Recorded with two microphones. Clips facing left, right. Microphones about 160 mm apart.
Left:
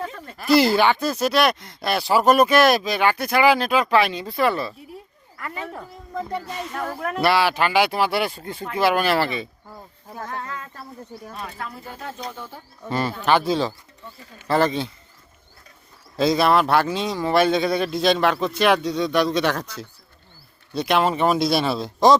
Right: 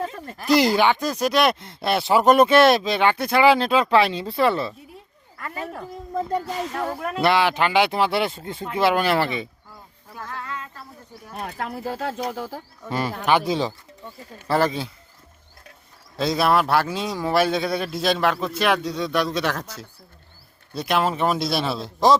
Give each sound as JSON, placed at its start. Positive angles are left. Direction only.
{"t": 0.0, "sound": "a sound", "side_deg": -25}
{"t": 0.4, "sound": "speech", "side_deg": -15}
{"t": 6.7, "sound": "speech", "side_deg": -15}
{"t": 9.6, "sound": "a sound", "side_deg": 40}
{"t": 11.3, "sound": "speech", "side_deg": -60}
{"t": 12.9, "sound": "speech", "side_deg": -10}
{"t": 16.1, "sound": "speech", "side_deg": 0}